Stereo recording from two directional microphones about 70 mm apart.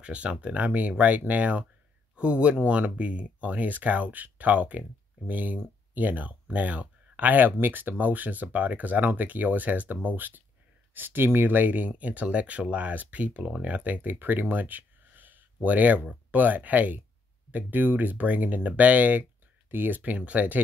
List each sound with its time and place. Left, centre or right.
0.0 s speech: centre